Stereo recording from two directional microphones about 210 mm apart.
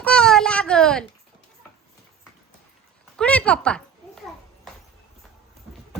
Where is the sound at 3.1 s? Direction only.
5° left (ahead or behind).